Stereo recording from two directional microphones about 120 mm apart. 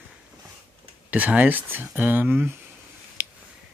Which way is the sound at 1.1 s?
10° right (ahead or behind).